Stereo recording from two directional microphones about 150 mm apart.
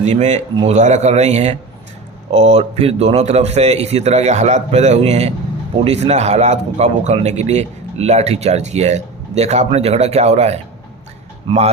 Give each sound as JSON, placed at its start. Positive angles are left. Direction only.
{"t": 0.0, "sound": "a man's voice", "side_deg": -50}